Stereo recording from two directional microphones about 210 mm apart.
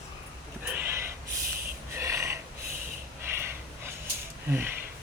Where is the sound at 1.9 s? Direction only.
15° right (ahead or behind).